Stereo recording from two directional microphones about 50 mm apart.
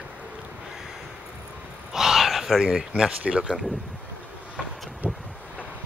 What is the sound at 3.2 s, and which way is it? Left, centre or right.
Speech, centre.